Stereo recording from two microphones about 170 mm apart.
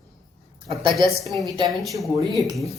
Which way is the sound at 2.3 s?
20° right (ahead or behind).